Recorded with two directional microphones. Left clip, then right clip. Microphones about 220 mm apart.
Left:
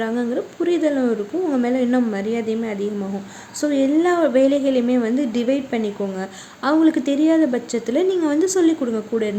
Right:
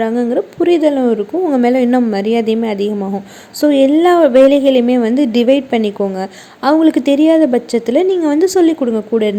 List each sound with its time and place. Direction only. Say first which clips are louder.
0.0 s a woman's voice: right 8 dB; 25° right (ahead or behind)